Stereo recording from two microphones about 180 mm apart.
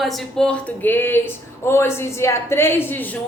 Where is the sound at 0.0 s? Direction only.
Centre (ahead or behind).